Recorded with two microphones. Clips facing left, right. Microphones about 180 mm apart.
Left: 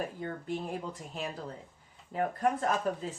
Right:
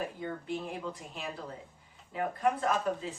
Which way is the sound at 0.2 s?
45° left (ahead or behind).